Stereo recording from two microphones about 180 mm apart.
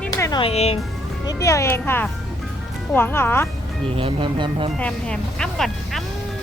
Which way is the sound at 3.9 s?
30° right (ahead or behind).